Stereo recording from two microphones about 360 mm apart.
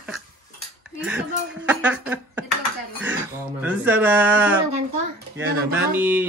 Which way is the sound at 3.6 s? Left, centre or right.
Centre.